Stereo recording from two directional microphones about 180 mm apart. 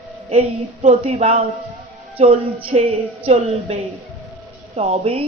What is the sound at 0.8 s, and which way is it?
A woman's voice, 35° right (ahead or behind).